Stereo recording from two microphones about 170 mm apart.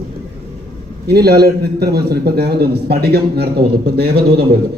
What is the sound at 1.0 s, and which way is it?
A man's voice, 70° right (ahead or behind).